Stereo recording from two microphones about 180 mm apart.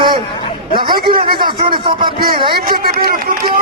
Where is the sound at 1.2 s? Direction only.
55° right (ahead or behind).